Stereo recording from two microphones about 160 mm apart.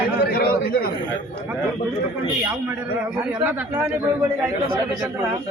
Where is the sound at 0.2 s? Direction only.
70° left (ahead or behind).